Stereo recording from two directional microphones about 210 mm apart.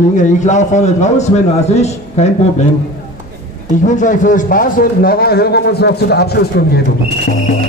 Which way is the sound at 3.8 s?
35° left (ahead or behind).